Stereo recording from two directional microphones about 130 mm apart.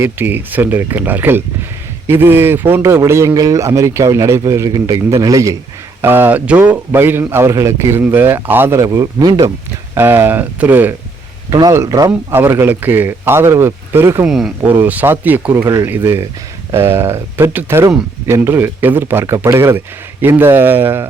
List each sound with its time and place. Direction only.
0.0 s a man's voice: 15° right (ahead or behind)
9.9 s a man's voice: 15° right (ahead or behind)
11.5 s a man's voice: 25° right (ahead or behind)
14.3 s speech: 5° right (ahead or behind)
14.8 s a man's voice: 15° right (ahead or behind)
15.5 s a man's voice: 25° right (ahead or behind)